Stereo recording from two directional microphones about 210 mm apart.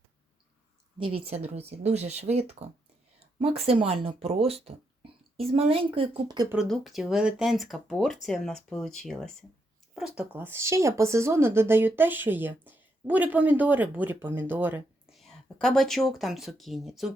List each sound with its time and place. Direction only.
1.1 s a woman's voice: 30° right (ahead or behind)
6.5 s speech: centre (ahead or behind)
15.3 s speech: 5° left (ahead or behind)